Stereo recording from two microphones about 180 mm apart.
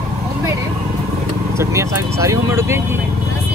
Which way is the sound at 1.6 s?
15° right (ahead or behind).